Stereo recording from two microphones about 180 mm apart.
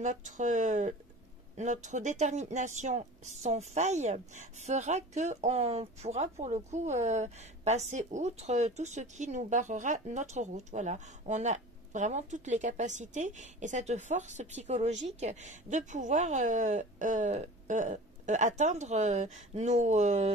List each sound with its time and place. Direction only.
0.0 s speech: 45° right (ahead or behind)